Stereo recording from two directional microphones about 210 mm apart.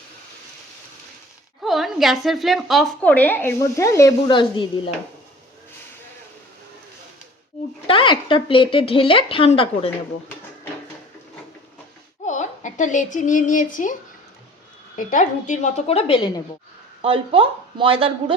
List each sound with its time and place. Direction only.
1.6 s a woman's voice: centre (ahead or behind); by 4.6 s 20° left (ahead or behind)
7.9 s speech: 25° left (ahead or behind)
12.2 s a woman's voice: 35° left (ahead or behind)
14.9 s a woman's voice: 40° left (ahead or behind); by 16.4 s 25° left (ahead or behind)
17.0 s speech: 25° right (ahead or behind)